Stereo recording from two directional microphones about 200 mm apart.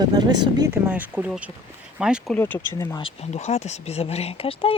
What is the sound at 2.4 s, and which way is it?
Speech, 10° left (ahead or behind).